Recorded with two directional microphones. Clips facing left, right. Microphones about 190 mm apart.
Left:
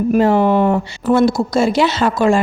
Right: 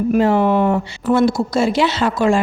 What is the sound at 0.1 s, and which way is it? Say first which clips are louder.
Speech: left 2 dB; 40° left (ahead or behind).